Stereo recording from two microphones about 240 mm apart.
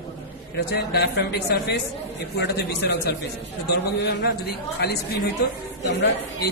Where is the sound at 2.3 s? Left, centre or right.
Left.